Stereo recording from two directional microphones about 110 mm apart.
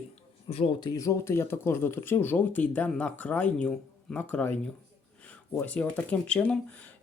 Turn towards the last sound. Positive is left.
turn(degrees=10)  # may be behind; listen again after turning